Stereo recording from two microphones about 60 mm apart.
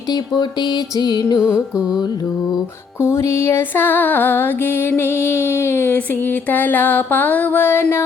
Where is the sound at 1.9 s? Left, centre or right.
Left.